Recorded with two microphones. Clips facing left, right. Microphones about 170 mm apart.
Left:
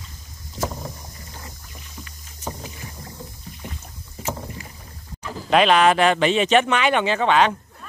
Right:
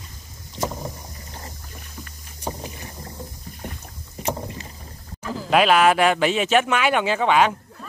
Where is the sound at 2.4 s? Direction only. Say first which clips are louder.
Right 2 dB; 15° right (ahead or behind).